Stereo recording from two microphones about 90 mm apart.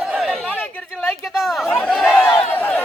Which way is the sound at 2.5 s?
20° left (ahead or behind).